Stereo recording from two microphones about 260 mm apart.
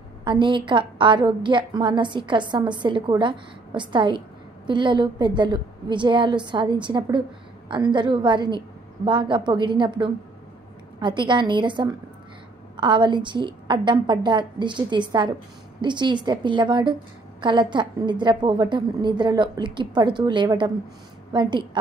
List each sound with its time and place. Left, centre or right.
0.2 s a woman's voice: centre